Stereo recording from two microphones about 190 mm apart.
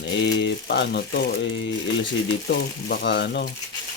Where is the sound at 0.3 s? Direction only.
65° left (ahead or behind).